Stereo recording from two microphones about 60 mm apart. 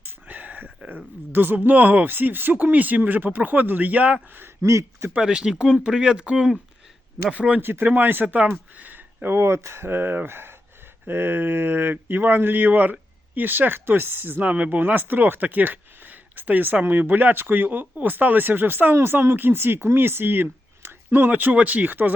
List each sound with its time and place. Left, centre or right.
0.0 s a sound: right
1.3 s speech: right
2.1 s speech: right
4.6 s a man's voice: right
5.2 s speech: centre
7.6 s speech: right